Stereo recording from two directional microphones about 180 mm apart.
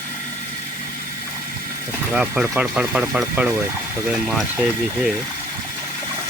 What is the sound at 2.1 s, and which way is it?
Speech, 5° right (ahead or behind).